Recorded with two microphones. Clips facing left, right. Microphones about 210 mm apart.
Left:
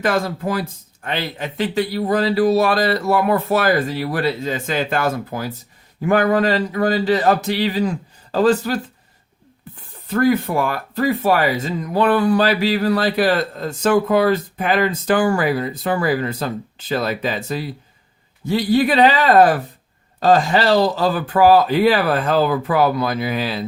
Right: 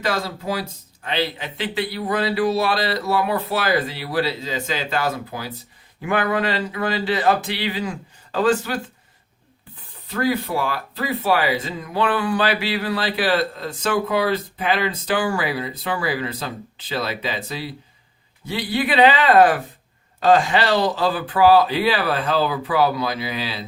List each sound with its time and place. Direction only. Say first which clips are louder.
0.0 s speech: left 5 dB; 50° left (ahead or behind)
10.1 s speech: left 5 dB; 50° left (ahead or behind)